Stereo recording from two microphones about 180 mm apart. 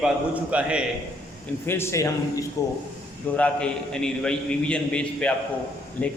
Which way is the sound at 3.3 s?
5° left (ahead or behind).